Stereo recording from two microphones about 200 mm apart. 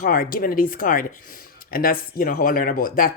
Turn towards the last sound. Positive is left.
turn(degrees=45)  # may be behind; listen again after turning